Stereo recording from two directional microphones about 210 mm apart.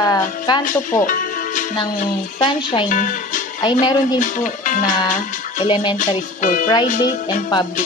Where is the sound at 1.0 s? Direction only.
40° left (ahead or behind).